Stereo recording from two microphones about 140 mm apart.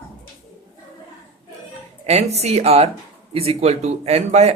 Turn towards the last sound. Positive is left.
turn(degrees=-50)  # may be behind; listen again after turning